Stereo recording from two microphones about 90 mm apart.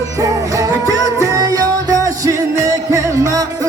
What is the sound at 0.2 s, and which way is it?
Music, 40° right (ahead or behind).